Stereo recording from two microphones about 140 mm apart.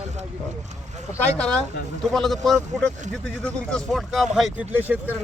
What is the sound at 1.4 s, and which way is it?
Speech, 5° left (ahead or behind).